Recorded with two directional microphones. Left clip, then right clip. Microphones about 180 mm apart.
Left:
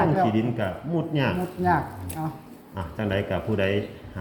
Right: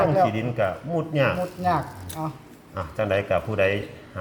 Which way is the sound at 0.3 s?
75° right (ahead or behind).